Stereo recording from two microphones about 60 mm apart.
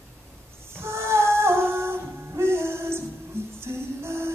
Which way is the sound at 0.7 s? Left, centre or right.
Right.